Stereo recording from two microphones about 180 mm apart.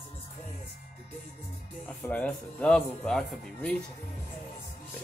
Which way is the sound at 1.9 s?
5° left (ahead or behind).